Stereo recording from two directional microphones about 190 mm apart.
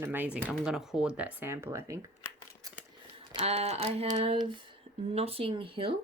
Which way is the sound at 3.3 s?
35° right (ahead or behind).